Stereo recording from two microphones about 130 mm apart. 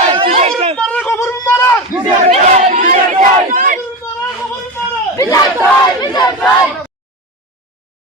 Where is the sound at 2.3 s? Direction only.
70° right (ahead or behind); by 3.7 s 90° right.